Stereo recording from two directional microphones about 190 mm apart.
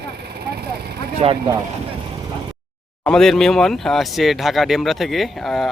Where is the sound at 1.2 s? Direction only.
30° right (ahead or behind).